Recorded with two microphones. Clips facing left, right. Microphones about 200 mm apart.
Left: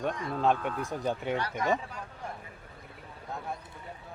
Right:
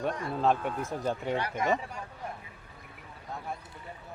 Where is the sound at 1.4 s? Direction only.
20° right (ahead or behind).